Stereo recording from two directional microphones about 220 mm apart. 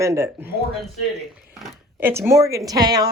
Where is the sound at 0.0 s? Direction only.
10° right (ahead or behind).